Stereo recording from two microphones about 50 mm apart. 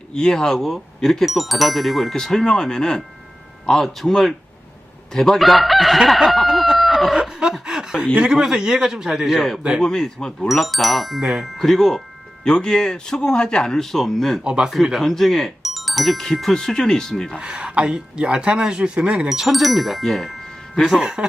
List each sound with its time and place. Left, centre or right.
0.1 s speech: centre
7.6 s a man's voice: centre
9.8 s speech: centre
10.5 s speech: centre
12.5 s speech: centre
14.4 s speech: centre
14.9 s speech: centre
17.4 s speech: right
19.3 s speech: centre
20.9 s a man's voice: centre